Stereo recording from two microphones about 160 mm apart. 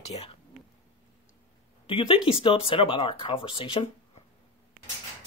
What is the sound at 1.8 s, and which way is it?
Speech, 35° left (ahead or behind).